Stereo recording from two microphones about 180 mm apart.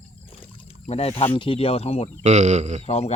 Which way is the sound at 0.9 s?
35° left (ahead or behind).